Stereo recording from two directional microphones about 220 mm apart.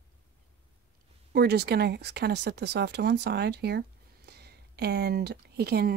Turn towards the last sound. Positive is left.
turn(degrees=-45)  # may be behind; listen again after turning